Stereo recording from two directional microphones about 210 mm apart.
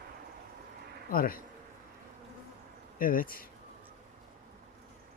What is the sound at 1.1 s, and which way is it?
Speech, 45° left (ahead or behind).